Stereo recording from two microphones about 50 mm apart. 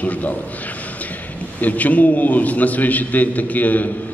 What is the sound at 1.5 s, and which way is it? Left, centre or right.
A man's voice, left.